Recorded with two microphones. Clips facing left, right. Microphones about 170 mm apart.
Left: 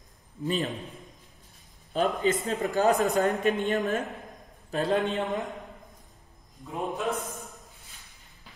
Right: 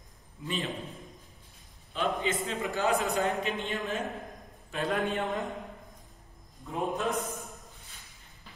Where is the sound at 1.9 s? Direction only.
40° left (ahead or behind).